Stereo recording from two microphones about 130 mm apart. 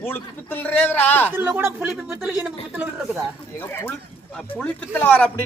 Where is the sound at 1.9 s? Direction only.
5° right (ahead or behind).